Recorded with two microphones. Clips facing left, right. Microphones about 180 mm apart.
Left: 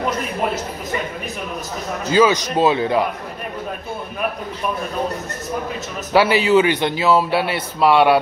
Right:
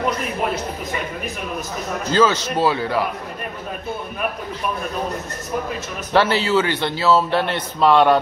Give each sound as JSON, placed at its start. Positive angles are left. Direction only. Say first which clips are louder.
{"t": 2.0, "sound": "a man's voice", "louder": "left 2 dB", "side_deg": 15}
{"t": 6.1, "sound": "a man's voice", "louder": "left 3 dB", "side_deg": 15}